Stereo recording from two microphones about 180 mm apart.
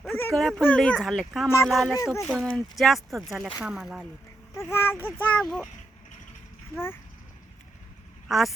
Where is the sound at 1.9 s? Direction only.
15° left (ahead or behind).